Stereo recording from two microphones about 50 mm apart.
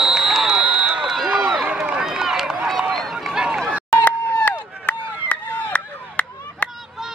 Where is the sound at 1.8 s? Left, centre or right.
Centre.